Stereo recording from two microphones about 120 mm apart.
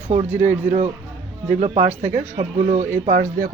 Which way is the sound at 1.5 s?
65° right (ahead or behind).